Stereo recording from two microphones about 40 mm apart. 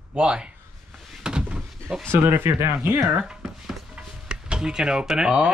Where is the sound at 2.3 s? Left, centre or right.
Right.